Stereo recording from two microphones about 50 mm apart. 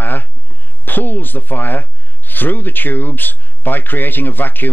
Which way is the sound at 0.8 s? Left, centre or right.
Left.